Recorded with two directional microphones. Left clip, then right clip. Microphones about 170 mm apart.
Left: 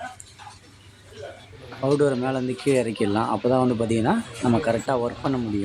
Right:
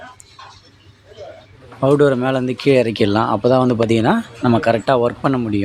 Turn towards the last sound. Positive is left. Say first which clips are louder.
# right 9 dB
turn(degrees=-25)  # may be behind; listen again after turning